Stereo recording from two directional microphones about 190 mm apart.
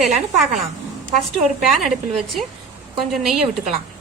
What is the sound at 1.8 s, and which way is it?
A woman's voice, centre (ahead or behind).